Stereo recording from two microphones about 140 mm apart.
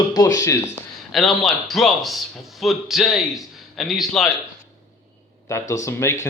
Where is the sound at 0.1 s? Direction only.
25° left (ahead or behind).